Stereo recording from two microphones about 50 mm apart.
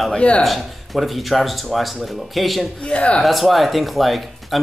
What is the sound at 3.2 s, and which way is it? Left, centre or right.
Speech, centre.